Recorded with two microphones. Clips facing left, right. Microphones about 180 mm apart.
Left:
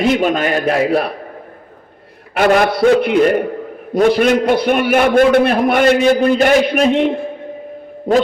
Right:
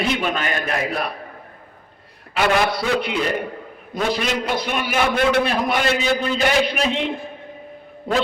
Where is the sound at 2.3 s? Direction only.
50° left (ahead or behind).